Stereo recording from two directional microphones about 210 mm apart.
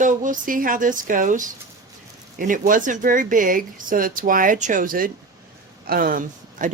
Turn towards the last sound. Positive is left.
turn(degrees=-40)  # may be behind; listen again after turning